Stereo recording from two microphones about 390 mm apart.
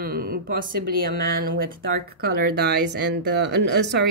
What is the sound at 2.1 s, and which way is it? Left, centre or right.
Speech, right.